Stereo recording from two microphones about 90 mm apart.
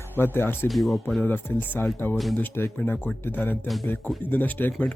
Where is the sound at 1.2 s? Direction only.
20° left (ahead or behind).